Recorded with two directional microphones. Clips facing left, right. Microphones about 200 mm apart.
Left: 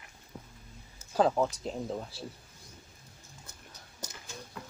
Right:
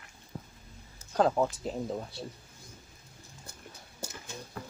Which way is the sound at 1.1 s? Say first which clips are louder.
Even; centre (ahead or behind).